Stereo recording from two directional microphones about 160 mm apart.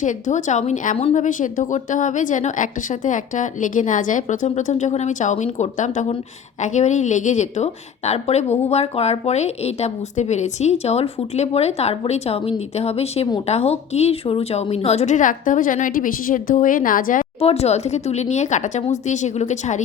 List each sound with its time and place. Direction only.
0.0 s a woman's voice: 50° left (ahead or behind)
17.4 s a woman's voice: 40° left (ahead or behind)